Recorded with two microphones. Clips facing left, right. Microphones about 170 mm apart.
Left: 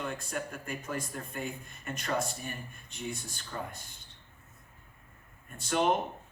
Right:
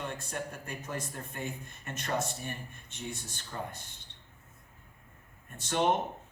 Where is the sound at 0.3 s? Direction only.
25° right (ahead or behind).